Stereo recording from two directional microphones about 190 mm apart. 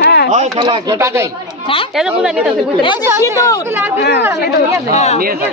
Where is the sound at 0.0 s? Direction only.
60° left (ahead or behind).